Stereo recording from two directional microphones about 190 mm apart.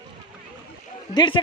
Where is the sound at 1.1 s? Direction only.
25° left (ahead or behind).